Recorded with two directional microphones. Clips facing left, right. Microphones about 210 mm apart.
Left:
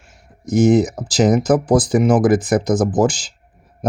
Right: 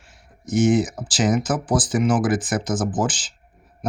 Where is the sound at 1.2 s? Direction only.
40° left (ahead or behind).